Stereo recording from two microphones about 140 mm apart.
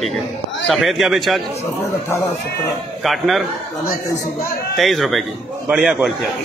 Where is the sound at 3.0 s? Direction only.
Centre (ahead or behind).